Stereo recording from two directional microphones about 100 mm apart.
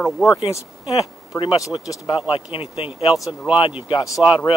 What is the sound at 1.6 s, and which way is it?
Speech, 40° left (ahead or behind).